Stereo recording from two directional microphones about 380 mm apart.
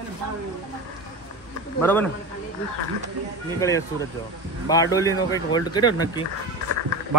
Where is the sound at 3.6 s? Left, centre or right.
Centre.